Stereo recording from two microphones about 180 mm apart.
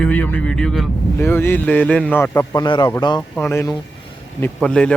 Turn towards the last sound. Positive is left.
turn(degrees=5)  # may be behind; listen again after turning